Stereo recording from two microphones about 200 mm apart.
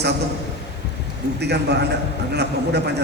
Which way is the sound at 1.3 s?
55° right (ahead or behind).